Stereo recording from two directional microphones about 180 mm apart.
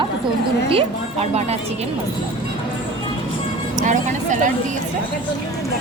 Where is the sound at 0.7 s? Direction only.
35° right (ahead or behind).